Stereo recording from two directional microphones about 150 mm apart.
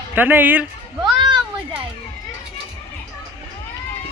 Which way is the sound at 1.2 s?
30° right (ahead or behind).